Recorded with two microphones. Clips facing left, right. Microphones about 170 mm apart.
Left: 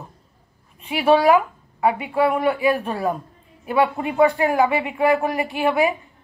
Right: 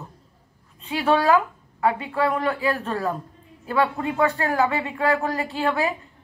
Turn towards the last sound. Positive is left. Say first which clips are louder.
# left 4 dB
turn(degrees=15)  # may be behind; listen again after turning